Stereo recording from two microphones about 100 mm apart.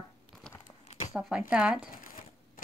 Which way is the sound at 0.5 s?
10° left (ahead or behind).